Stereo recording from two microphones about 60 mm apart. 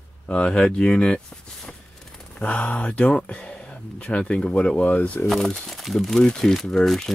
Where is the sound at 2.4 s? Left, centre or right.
Left.